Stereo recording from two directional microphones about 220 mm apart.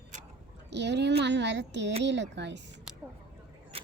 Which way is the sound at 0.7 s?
50° right (ahead or behind).